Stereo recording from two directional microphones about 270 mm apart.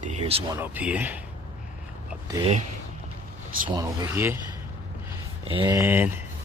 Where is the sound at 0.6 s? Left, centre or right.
Centre.